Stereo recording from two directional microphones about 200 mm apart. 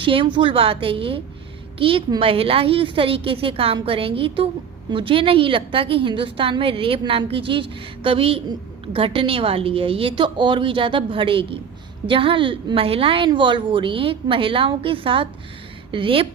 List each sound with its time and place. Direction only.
0.0 s a woman's voice: 25° right (ahead or behind)